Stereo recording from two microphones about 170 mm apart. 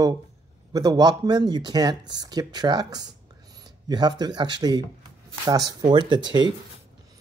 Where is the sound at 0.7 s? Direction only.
25° right (ahead or behind).